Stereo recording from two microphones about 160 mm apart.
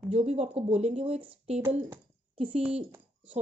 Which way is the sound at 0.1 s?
40° right (ahead or behind).